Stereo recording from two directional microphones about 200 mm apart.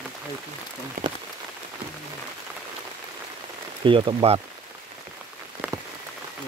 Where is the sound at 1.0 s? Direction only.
45° right (ahead or behind).